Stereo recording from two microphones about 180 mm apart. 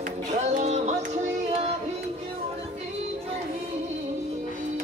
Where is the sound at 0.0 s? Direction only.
45° right (ahead or behind).